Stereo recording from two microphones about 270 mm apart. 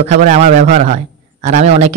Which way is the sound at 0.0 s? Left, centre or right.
Right.